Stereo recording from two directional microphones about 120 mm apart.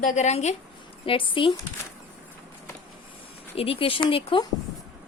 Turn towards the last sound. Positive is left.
turn(degrees=45)  # may be behind; listen again after turning